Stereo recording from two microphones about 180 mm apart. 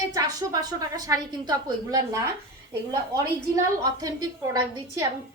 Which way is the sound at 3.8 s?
20° right (ahead or behind).